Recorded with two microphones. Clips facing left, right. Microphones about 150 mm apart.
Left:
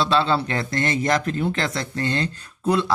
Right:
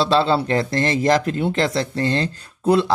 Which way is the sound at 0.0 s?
30° right (ahead or behind).